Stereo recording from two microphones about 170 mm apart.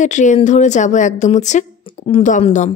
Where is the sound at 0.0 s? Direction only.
45° left (ahead or behind).